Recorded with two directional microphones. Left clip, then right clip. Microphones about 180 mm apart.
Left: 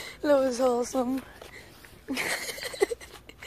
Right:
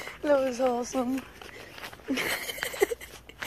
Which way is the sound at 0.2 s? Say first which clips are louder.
Left 2 dB; 30° left (ahead or behind).